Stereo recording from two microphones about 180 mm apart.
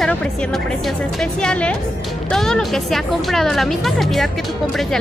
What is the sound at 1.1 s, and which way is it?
Speech, 5° left (ahead or behind).